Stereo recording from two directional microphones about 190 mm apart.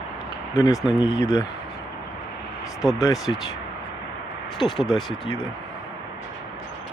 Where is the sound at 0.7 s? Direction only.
5° right (ahead or behind).